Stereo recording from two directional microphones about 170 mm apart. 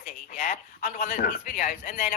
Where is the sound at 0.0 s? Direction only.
55° left (ahead or behind).